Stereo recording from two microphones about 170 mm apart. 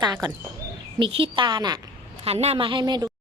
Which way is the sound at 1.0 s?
30° right (ahead or behind).